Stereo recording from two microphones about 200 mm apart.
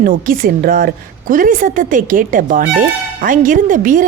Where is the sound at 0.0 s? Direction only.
45° right (ahead or behind).